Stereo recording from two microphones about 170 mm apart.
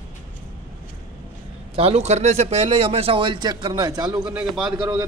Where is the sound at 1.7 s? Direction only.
35° right (ahead or behind).